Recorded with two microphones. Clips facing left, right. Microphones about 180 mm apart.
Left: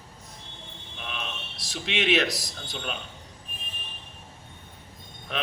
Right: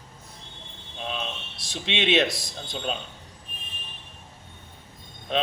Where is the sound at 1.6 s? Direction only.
25° right (ahead or behind).